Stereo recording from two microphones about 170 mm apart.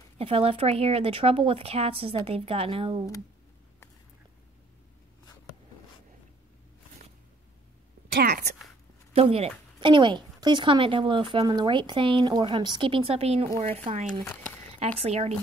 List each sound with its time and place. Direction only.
0.2 s a woman's voice: 35° right (ahead or behind)
8.1 s a sound: 65° right (ahead or behind)
9.1 s a woman's voice: 35° right (ahead or behind)
14.2 s speech: 10° left (ahead or behind)
14.8 s a woman's voice: 35° right (ahead or behind)